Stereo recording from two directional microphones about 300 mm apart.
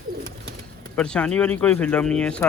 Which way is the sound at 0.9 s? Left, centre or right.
Centre.